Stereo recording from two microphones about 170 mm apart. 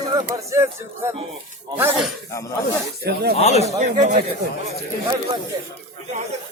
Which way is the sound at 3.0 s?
70° right (ahead or behind).